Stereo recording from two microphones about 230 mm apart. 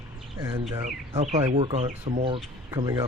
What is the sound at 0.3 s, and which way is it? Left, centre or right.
Speech, centre.